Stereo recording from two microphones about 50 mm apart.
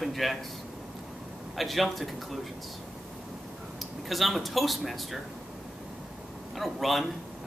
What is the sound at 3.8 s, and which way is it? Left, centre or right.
Speech, centre.